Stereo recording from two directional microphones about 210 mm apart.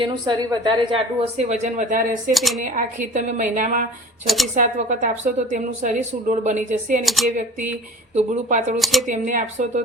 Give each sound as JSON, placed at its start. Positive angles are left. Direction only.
{"t": 0.0, "sound": "a woman's voice", "side_deg": -20}
{"t": 2.3, "sound": "speech", "side_deg": 0}
{"t": 2.6, "sound": "a woman's voice", "side_deg": -40}
{"t": 7.0, "sound": "speech", "side_deg": 0}
{"t": 8.1, "sound": "a woman's voice", "side_deg": -35}
{"t": 8.8, "sound": "speech", "side_deg": 0}
{"t": 9.0, "sound": "a woman's voice", "side_deg": -40}